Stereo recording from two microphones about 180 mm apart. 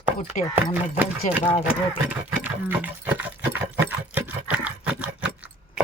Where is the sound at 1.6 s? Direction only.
5° right (ahead or behind).